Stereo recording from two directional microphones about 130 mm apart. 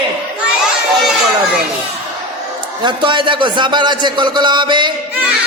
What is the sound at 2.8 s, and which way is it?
A man's voice, 35° right (ahead or behind).